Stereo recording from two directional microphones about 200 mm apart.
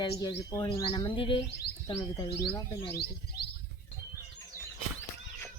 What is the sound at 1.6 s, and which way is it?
Music, 55° left (ahead or behind).